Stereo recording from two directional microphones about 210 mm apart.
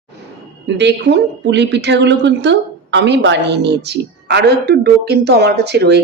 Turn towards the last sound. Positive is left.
turn(degrees=-55)  # may be behind; listen again after turning